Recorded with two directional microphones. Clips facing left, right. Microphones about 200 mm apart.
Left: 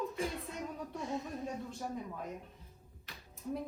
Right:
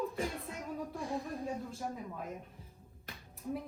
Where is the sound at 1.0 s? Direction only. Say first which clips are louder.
Left 1 dB; 20° left (ahead or behind).